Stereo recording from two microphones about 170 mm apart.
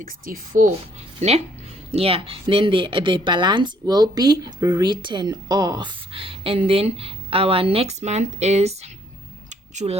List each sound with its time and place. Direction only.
0.0 s a woman's voice: 55° right (ahead or behind)
1.2 s a woman's voice: 45° right (ahead or behind)
9.5 s a sound: 40° right (ahead or behind)